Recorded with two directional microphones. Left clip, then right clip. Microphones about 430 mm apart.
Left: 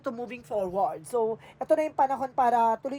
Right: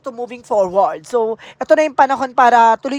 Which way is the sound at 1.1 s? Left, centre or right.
Right.